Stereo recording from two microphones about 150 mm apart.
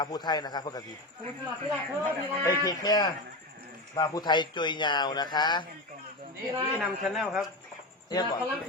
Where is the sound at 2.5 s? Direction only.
25° left (ahead or behind).